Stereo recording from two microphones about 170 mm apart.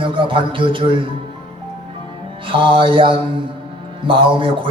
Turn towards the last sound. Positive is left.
turn(degrees=-30)  # may be behind; listen again after turning